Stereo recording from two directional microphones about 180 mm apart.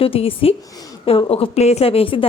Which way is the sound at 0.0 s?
30° left (ahead or behind).